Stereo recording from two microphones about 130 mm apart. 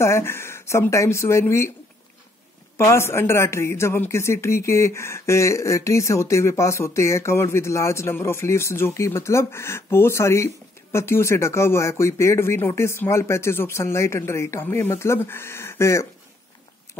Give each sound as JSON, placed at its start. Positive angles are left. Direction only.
{"t": 0.0, "sound": "a man's voice", "side_deg": 20}
{"t": 2.8, "sound": "a man's voice", "side_deg": 20}